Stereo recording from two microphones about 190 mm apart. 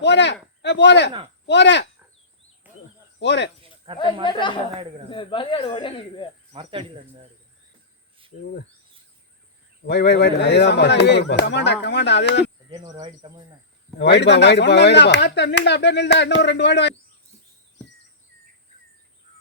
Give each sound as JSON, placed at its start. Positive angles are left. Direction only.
{"t": 0.0, "sound": "speech", "side_deg": 65}
{"t": 2.6, "sound": "a sound", "side_deg": -10}
{"t": 3.2, "sound": "speech", "side_deg": 65}
{"t": 3.9, "sound": "speech", "side_deg": 25}
{"t": 6.5, "sound": "cricket", "side_deg": -30}
{"t": 9.8, "sound": "speech", "side_deg": 60}
{"t": 13.0, "sound": "cricket", "side_deg": -25}
{"t": 14.0, "sound": "speech", "side_deg": 65}